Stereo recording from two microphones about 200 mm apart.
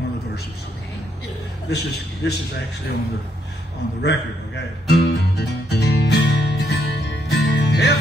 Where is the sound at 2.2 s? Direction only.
60° left (ahead or behind).